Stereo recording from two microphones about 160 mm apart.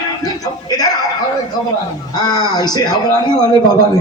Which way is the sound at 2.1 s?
25° left (ahead or behind).